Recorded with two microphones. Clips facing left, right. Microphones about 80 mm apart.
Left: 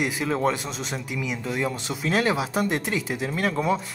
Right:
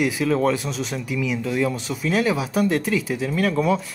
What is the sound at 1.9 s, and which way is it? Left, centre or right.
Speech, left.